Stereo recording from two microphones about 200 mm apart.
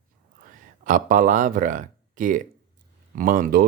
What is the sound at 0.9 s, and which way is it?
Speech, 40° right (ahead or behind).